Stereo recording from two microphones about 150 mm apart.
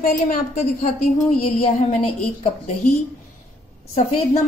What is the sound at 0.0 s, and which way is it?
Speech, 65° left (ahead or behind).